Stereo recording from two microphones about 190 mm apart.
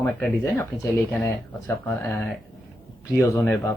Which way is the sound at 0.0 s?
10° left (ahead or behind).